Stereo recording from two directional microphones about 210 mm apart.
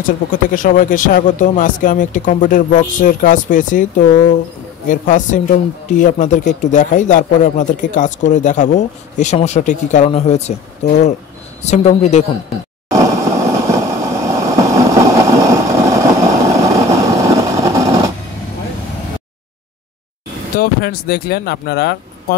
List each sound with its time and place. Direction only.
0.0 s speech: 40° left (ahead or behind)
12.9 s vehicle: 15° right (ahead or behind)
20.5 s speech: 45° left (ahead or behind)